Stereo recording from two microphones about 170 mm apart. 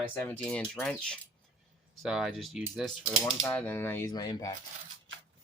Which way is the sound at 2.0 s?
Centre (ahead or behind).